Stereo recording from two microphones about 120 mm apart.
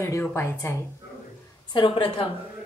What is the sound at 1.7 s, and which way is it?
Speech, 45° left (ahead or behind).